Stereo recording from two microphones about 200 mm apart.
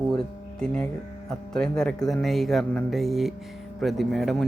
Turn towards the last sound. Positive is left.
turn(degrees=0)  # may be behind; listen again after turning